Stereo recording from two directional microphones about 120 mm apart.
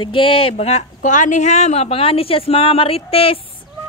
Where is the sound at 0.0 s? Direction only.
45° left (ahead or behind).